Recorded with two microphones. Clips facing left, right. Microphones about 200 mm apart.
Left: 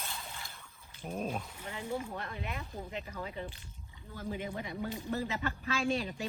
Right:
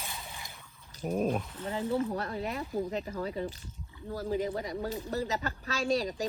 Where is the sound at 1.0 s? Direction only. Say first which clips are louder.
Right 8 dB; 50° right (ahead or behind).